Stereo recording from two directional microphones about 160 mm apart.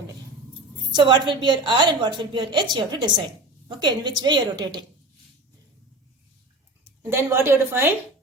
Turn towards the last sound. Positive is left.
turn(degrees=-15)  # may be behind; listen again after turning